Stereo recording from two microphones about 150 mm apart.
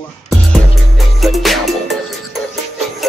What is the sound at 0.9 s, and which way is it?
Music, centre (ahead or behind).